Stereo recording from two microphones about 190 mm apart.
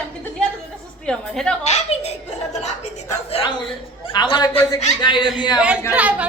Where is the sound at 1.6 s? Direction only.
35° left (ahead or behind).